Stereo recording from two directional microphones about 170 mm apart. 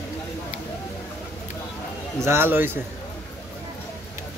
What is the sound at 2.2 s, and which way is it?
Speech, 15° right (ahead or behind).